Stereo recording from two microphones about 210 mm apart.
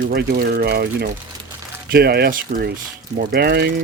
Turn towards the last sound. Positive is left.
turn(degrees=-50)  # may be behind; listen again after turning